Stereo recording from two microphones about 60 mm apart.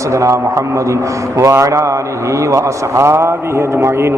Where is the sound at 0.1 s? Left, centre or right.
Right.